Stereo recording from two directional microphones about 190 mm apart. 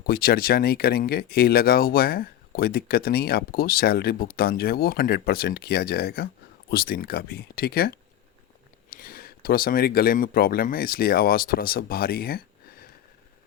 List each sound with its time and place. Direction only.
0.1 s speech: 50° left (ahead or behind)